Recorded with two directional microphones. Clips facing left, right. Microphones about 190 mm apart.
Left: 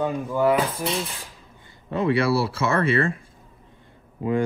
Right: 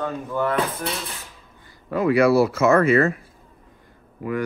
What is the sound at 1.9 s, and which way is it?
Speech, 30° left (ahead or behind).